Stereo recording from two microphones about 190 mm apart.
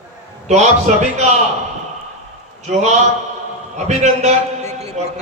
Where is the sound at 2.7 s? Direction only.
35° right (ahead or behind).